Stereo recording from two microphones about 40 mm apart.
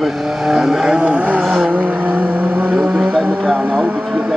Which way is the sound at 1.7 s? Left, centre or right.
Right.